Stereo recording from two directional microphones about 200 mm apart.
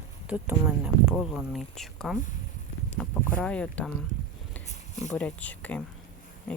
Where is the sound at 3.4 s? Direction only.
5° left (ahead or behind).